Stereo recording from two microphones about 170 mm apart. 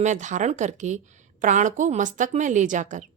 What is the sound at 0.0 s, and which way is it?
A woman's voice, 45° right (ahead or behind).